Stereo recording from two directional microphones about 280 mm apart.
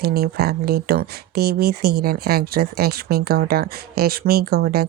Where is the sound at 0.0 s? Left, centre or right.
Right.